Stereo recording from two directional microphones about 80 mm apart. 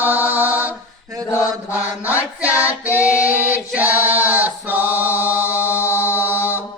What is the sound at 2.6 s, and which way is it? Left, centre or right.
Female singing, centre.